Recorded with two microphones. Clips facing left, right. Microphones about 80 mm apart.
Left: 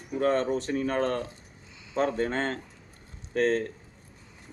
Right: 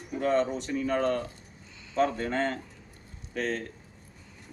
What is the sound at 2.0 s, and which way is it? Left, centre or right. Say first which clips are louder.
Speech: even; left.